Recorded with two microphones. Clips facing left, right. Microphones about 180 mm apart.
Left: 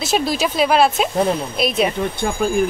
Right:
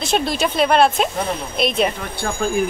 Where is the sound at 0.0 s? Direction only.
5° left (ahead or behind).